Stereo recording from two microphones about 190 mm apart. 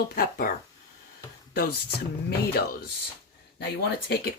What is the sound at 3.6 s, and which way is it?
Speech, 60° left (ahead or behind).